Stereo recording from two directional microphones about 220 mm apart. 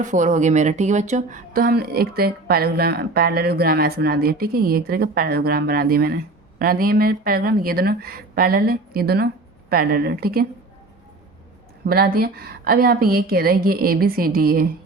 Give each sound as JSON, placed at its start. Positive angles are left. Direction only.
{"t": 0.0, "sound": "speech", "side_deg": -35}
{"t": 11.9, "sound": "speech", "side_deg": -45}